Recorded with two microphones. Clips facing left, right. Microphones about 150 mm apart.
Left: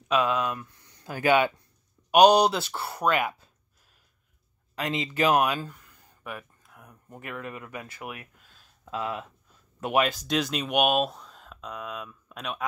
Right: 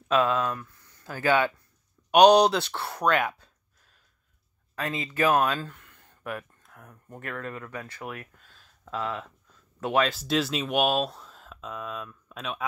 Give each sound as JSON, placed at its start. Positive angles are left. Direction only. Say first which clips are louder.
{"t": 0.3, "sound": "speech", "louder": "right 1 dB", "side_deg": 20}
{"t": 2.0, "sound": "speech", "louder": "right 1 dB", "side_deg": 0}
{"t": 4.7, "sound": "speech", "louder": "left 1 dB", "side_deg": 20}
{"t": 10.2, "sound": "speech", "louder": "right 1 dB", "side_deg": 0}